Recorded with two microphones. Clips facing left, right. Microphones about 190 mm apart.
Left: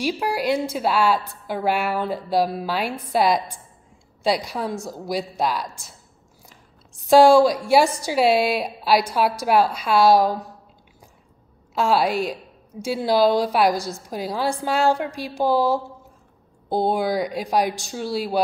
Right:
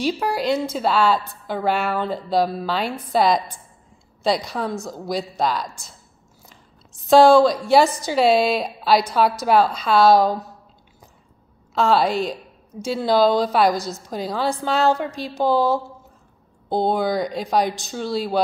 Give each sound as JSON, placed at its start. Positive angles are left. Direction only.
{"t": 0.0, "sound": "a woman's voice", "side_deg": 10}
{"t": 7.1, "sound": "a woman's voice", "side_deg": 10}
{"t": 11.7, "sound": "a woman's voice", "side_deg": 10}